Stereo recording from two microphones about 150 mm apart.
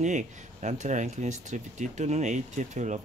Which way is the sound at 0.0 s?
50° right (ahead or behind).